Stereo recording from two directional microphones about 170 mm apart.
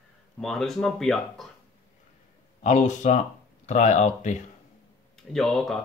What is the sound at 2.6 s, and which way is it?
Speech, 45° left (ahead or behind).